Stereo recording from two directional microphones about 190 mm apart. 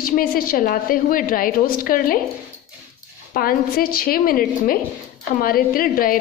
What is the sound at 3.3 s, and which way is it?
A woman's voice, 50° left (ahead or behind).